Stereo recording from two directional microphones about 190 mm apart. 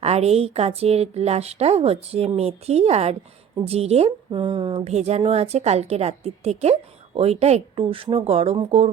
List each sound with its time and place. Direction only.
0.0 s a woman's voice: 35° right (ahead or behind)